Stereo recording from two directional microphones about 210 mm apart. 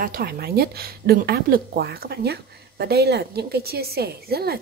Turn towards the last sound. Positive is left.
turn(degrees=-45)  # may be behind; listen again after turning